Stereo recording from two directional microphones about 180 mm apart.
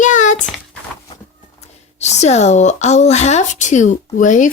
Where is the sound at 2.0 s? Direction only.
40° left (ahead or behind).